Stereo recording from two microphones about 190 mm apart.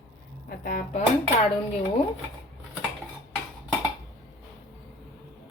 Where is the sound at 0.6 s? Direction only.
50° left (ahead or behind).